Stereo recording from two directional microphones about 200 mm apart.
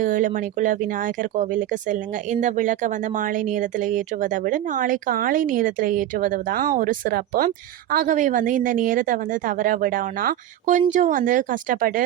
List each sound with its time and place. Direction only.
0.0 s speech: 40° right (ahead or behind)